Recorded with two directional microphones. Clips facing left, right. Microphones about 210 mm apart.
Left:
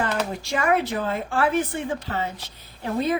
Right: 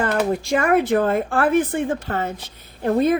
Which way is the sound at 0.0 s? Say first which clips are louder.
Right 6 dB; 50° right (ahead or behind).